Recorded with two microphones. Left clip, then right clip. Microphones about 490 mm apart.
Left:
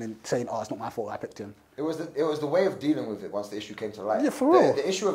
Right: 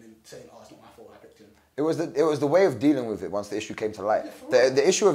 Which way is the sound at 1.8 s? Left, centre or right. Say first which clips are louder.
Right 5 dB; right.